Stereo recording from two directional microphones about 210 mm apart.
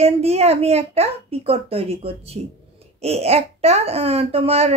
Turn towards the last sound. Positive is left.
turn(degrees=-30)  # may be behind; listen again after turning